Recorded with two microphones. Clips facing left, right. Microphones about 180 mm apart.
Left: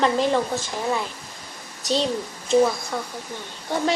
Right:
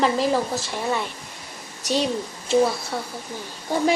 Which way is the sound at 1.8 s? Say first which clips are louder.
Even; 30° left (ahead or behind).